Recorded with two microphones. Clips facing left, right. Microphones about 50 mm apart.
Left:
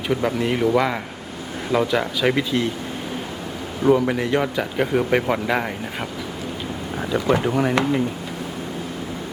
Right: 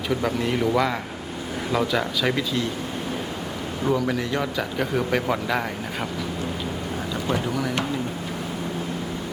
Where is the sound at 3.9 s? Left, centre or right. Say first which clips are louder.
Left 6 dB; left.